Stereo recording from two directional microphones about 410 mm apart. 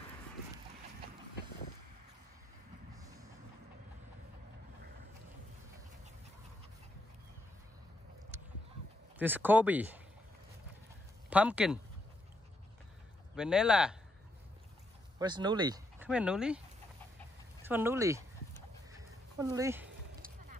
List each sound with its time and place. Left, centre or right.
9.2 s speech: centre
11.2 s speech: centre
13.4 s speech: centre
15.1 s speech: centre
18.9 s a sound: centre
20.1 s music: right